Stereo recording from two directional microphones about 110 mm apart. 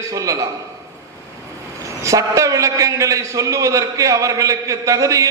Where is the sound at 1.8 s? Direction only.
30° right (ahead or behind).